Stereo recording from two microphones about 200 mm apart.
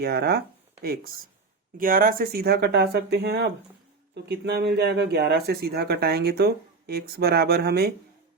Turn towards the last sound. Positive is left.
turn(degrees=-55)  # may be behind; listen again after turning